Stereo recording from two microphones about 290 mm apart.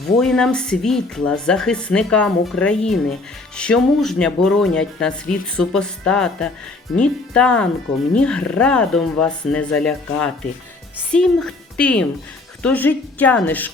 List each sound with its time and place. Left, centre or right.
0.2 s speech: centre
11.1 s a woman's voice: centre